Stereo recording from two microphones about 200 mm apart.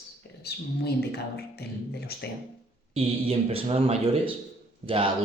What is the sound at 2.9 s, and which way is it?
Speech, 30° right (ahead or behind).